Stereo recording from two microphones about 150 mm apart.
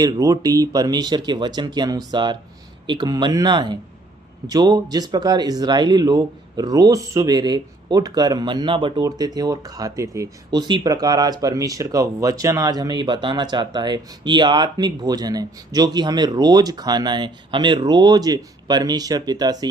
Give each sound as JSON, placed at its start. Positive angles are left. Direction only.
{"t": 0.0, "sound": "speech", "side_deg": -25}